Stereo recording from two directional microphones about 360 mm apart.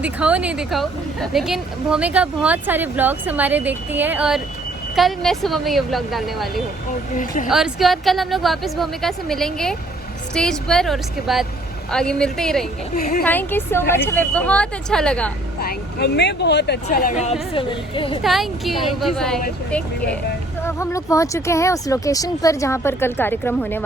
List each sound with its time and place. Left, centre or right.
0.0 s a woman's voice: centre
7.1 s speech: left
7.5 s a woman's voice: centre
12.9 s speech: left
13.2 s a woman's voice: centre
15.6 s speech: left
18.2 s a woman's voice: centre